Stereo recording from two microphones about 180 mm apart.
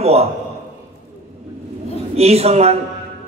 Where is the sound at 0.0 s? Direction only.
35° right (ahead or behind).